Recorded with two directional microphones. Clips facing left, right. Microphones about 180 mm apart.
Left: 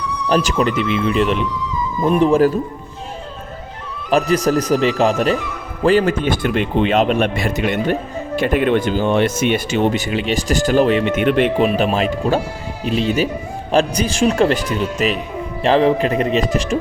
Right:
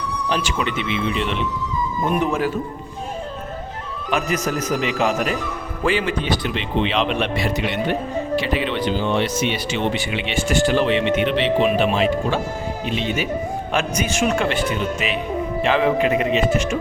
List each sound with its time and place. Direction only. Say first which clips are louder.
0.3 s speech: left 8 dB; 40° left (ahead or behind)
2.0 s speech: left 9 dB; 30° left (ahead or behind)
4.1 s speech: left 7 dB; 35° left (ahead or behind)